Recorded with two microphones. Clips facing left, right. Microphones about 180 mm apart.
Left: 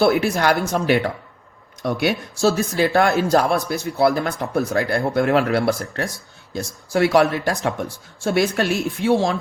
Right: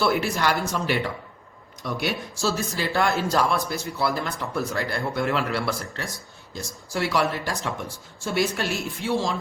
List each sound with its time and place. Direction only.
0.0 s speech: 55° left (ahead or behind)